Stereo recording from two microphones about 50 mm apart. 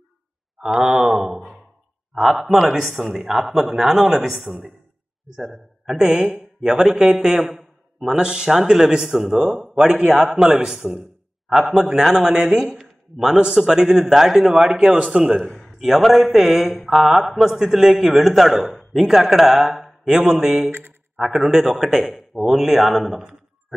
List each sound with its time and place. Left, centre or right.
0.6 s sigh: centre
0.8 s speech: centre
1.1 s sigh: centre
2.1 s speech: centre
12.7 s a sound: centre
13.6 s speech: centre
15.6 s speech: centre